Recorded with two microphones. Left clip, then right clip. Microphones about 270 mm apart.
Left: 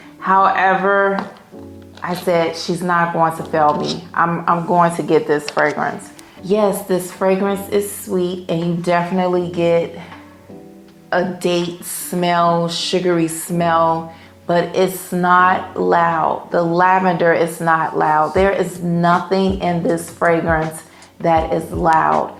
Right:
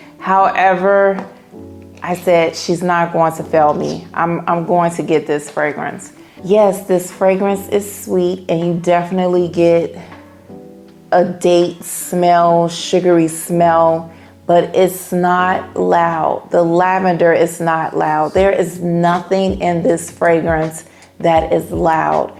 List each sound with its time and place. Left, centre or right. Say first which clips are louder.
0.2 s speech: right 2 dB; right
11.1 s speech: right 6 dB; right
12.1 s speech: right 5 dB; right
14.4 s speech: right 5 dB; right